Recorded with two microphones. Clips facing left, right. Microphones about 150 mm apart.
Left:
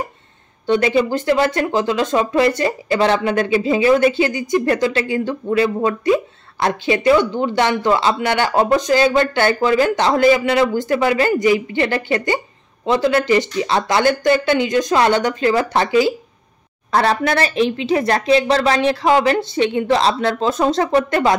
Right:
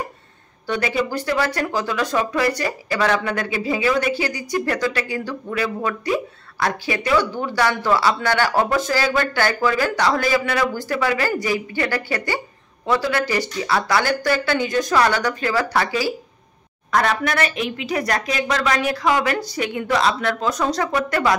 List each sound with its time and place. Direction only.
0.7 s speech: 25° left (ahead or behind)